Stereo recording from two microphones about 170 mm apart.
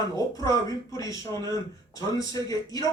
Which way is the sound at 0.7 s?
20° left (ahead or behind).